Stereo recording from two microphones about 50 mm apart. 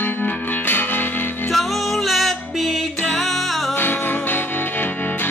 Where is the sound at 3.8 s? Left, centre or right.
Left.